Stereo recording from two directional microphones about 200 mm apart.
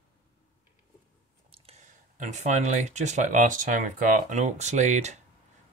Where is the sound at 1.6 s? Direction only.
35° right (ahead or behind).